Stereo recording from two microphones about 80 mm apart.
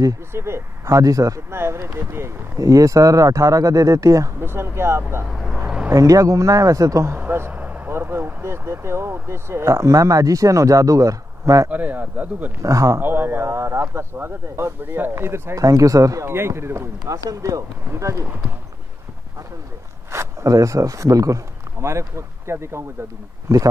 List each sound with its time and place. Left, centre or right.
0.3 s speech: right
1.5 s speech: right
4.5 s speech: right
5.3 s vehicle: centre
5.9 s speech: right
7.2 s a sound: right
7.9 s speech: right
11.7 s speech: right
12.6 s speech: right
13.0 s speech: right
15.5 s speech: right
17.2 s speech: right
20.1 s speech: right